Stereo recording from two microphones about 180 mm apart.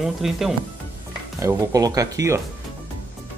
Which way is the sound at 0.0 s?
Centre (ahead or behind).